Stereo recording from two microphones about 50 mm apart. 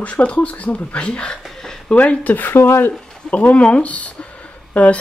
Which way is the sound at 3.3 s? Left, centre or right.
Left.